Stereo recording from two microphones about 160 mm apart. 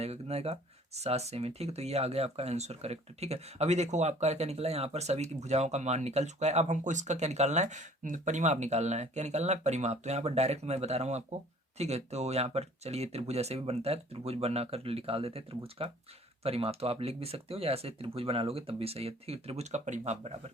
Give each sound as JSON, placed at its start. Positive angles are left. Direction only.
{"t": 0.0, "sound": "speech", "side_deg": -40}